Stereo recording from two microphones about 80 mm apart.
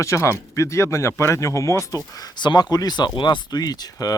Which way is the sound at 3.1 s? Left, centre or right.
Left.